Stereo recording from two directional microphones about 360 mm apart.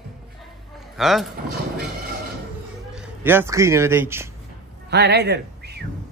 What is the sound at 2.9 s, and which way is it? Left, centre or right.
A man's voice, centre.